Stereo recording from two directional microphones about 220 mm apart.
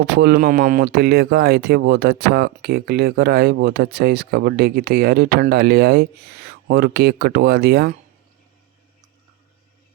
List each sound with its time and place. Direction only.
0.0 s speech: 45° right (ahead or behind)